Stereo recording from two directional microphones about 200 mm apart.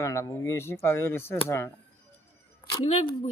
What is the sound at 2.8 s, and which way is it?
Speech, 30° left (ahead or behind).